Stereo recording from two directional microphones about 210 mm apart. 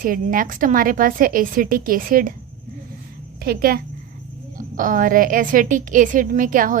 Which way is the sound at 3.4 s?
45° right (ahead or behind).